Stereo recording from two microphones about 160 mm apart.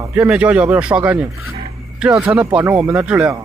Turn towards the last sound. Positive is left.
turn(degrees=-10)  # may be behind; listen again after turning